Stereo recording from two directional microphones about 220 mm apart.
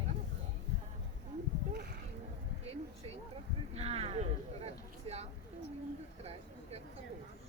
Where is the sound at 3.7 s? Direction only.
30° right (ahead or behind).